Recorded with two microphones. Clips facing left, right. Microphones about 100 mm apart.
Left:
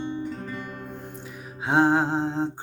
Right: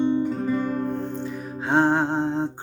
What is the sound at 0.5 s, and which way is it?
Music, 35° right (ahead or behind).